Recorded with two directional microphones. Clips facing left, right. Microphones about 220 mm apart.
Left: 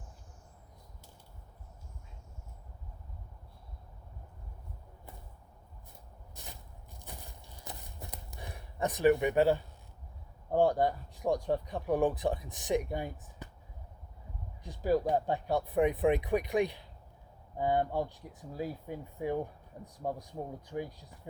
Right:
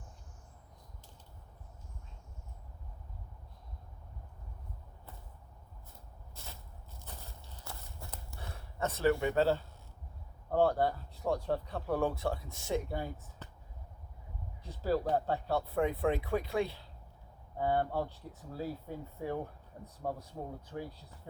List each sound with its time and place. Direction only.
6.3 s a sound: 15° left (ahead or behind)
10.5 s speech: 15° left (ahead or behind)
14.6 s speech: 15° left (ahead or behind)